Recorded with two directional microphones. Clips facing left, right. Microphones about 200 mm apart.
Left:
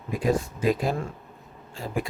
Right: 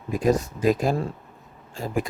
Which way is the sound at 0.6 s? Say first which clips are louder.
Right 3 dB; 45° right (ahead or behind).